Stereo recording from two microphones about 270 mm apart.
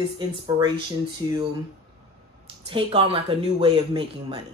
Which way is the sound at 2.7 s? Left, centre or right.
Centre.